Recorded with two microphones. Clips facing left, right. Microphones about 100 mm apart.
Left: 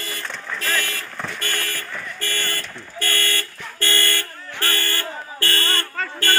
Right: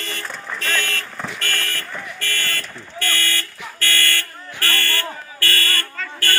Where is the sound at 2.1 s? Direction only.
15° left (ahead or behind).